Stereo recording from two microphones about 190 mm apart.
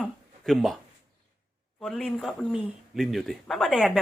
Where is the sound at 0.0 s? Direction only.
Centre (ahead or behind).